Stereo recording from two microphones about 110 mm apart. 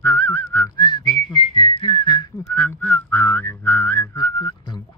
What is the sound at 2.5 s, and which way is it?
Whistling, 20° left (ahead or behind).